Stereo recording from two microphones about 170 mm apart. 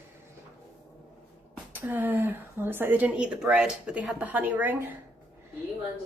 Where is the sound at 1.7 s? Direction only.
10° right (ahead or behind).